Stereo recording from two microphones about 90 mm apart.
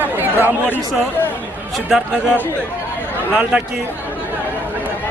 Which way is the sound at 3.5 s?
10° right (ahead or behind).